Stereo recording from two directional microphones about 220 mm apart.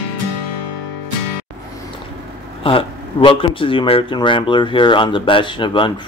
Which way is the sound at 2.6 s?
25° left (ahead or behind).